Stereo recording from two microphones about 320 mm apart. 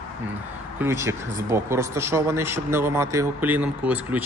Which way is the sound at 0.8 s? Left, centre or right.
Centre.